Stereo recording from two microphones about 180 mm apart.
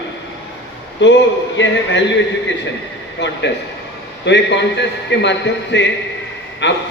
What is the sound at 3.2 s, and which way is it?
A man's voice, 70° left (ahead or behind).